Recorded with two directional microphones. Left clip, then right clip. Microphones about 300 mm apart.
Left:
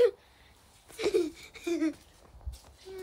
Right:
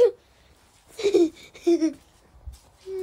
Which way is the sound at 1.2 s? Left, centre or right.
Centre.